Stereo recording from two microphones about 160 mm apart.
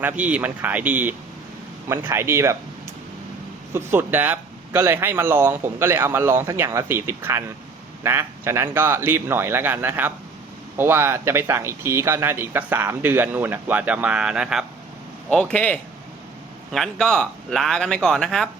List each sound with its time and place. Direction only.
0.0 s speech: 10° right (ahead or behind)
3.7 s speech: 15° right (ahead or behind)
15.3 s a man's voice: 5° left (ahead or behind)